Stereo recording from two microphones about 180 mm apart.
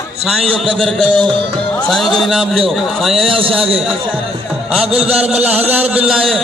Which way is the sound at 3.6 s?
Centre (ahead or behind).